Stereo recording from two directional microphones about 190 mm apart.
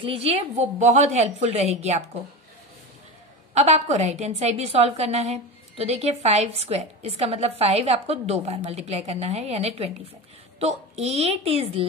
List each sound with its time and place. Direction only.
0.0 s a woman's voice: 30° right (ahead or behind)
3.5 s a woman's voice: 35° right (ahead or behind)